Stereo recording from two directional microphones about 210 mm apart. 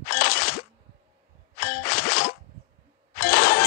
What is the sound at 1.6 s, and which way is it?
Ding, 45° left (ahead or behind).